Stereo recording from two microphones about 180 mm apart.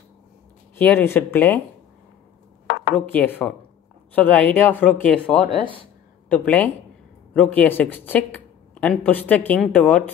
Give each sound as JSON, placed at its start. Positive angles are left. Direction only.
{"t": 0.7, "sound": "speech", "side_deg": 10}
{"t": 3.1, "sound": "speech", "side_deg": 10}
{"t": 5.3, "sound": "speech", "side_deg": 35}
{"t": 6.2, "sound": "speech", "side_deg": 10}